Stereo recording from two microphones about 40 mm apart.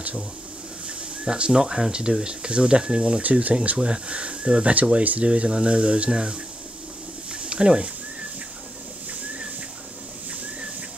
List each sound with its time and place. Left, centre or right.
0.8 s speech: right
3.7 s speech: right
5.2 s speech: right
7.2 s a sound: right